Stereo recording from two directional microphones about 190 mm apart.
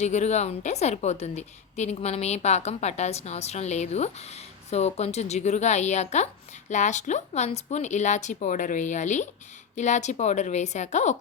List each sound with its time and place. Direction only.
0.0 s a woman's voice: 35° left (ahead or behind)